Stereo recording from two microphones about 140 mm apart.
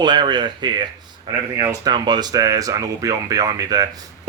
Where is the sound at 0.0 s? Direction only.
35° right (ahead or behind).